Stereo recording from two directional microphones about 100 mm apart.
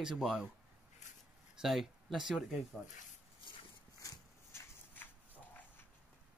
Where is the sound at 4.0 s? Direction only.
35° left (ahead or behind).